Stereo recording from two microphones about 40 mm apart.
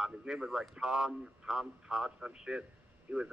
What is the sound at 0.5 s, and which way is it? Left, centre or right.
Speech, centre.